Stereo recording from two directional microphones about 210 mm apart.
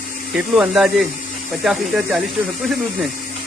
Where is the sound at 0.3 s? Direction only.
5° right (ahead or behind).